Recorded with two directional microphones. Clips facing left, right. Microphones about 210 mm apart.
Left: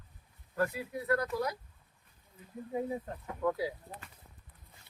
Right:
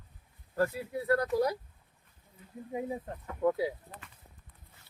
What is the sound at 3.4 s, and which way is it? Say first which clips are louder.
Speech: right 4 dB; 25° right (ahead or behind).